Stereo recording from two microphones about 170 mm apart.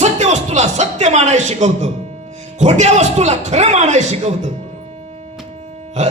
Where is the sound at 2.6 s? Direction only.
45° right (ahead or behind).